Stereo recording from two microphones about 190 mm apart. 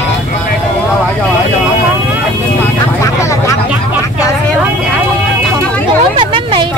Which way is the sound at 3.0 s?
15° left (ahead or behind).